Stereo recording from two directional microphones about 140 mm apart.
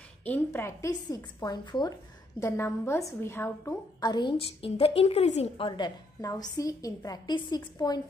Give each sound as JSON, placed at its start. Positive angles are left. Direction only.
{"t": 0.2, "sound": "a woman's voice", "side_deg": 15}
{"t": 2.4, "sound": "a woman's voice", "side_deg": 20}
{"t": 4.0, "sound": "a woman's voice", "side_deg": 30}
{"t": 5.7, "sound": "a woman's voice", "side_deg": 30}